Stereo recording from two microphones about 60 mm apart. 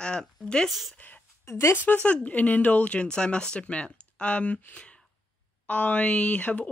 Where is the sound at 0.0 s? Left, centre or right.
Centre.